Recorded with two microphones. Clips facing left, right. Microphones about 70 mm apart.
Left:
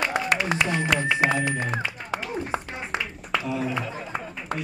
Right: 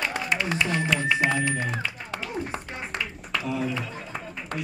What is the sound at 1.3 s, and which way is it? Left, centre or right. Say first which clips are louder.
Speech: left 1 dB; centre.